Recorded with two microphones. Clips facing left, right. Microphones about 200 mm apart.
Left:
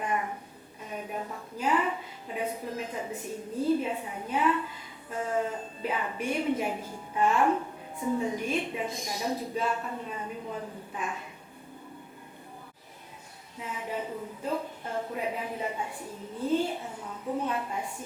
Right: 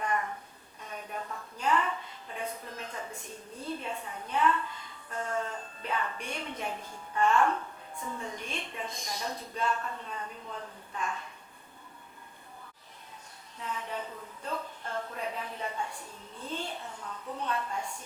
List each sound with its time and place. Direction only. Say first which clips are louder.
0.0 s a sound: left 1 dB; 10° left (ahead or behind)
3.2 s a woman's voice: left 11 dB; 5° left (ahead or behind)
13.6 s a woman's voice: left 3 dB; 10° left (ahead or behind)